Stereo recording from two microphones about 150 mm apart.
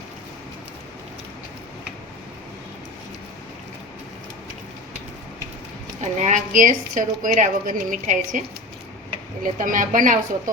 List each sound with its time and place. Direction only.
6.0 s a woman's voice: 55° right (ahead or behind)
9.4 s a woman's voice: 60° right (ahead or behind)